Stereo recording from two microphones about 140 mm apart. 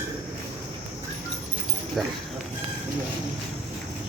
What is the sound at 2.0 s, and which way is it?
Speech, centre (ahead or behind).